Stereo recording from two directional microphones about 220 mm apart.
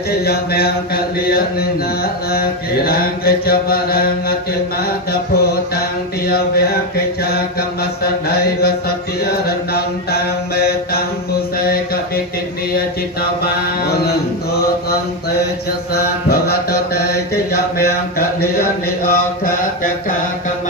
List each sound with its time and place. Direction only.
0.1 s mantra: 45° left (ahead or behind)
5.4 s mantra: 45° left (ahead or behind)
8.0 s mantra: 45° left (ahead or behind)
15.9 s mantra: 45° left (ahead or behind)